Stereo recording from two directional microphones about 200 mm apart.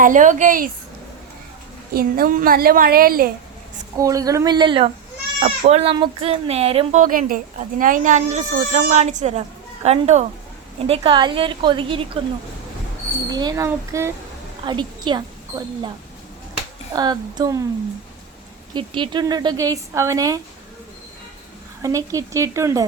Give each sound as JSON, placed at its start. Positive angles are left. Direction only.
{"t": 0.0, "sound": "speech", "side_deg": -40}
{"t": 1.9, "sound": "a woman's voice", "side_deg": -50}
{"t": 3.9, "sound": "a woman's voice", "side_deg": -15}
{"t": 13.3, "sound": "a woman's voice", "side_deg": -20}
{"t": 16.9, "sound": "a woman's voice", "side_deg": -20}
{"t": 18.7, "sound": "a woman's voice", "side_deg": -25}
{"t": 21.8, "sound": "speech", "side_deg": -15}